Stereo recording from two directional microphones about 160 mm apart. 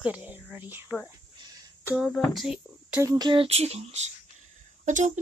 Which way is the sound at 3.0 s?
25° right (ahead or behind).